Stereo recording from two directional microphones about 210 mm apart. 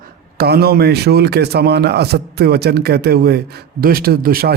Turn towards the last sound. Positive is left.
turn(degrees=-45)  # may be behind; listen again after turning